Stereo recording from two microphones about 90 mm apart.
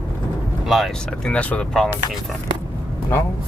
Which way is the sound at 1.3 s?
15° left (ahead or behind).